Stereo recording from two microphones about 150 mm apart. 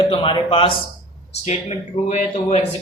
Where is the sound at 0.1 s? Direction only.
35° left (ahead or behind).